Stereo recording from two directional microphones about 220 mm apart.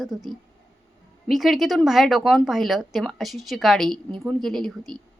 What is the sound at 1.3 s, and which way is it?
Speech, centre (ahead or behind).